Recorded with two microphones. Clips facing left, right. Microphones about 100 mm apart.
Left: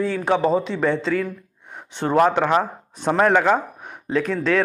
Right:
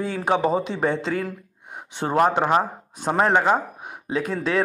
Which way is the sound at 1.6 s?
50° right (ahead or behind).